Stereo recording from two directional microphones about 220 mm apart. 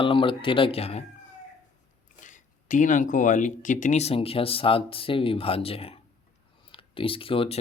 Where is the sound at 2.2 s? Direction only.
35° left (ahead or behind).